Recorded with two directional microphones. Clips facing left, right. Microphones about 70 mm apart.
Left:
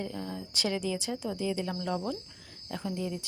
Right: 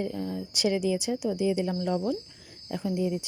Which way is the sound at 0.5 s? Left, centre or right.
Centre.